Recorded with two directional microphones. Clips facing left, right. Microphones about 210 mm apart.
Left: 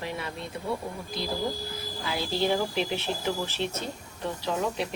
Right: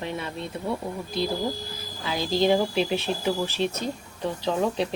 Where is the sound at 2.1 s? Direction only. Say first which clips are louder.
Right 5 dB; 15° right (ahead or behind).